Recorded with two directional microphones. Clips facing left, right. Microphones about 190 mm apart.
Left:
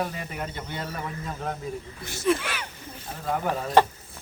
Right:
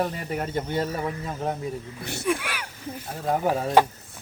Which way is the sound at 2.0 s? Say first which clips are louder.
Right 4 dB; 65° right (ahead or behind).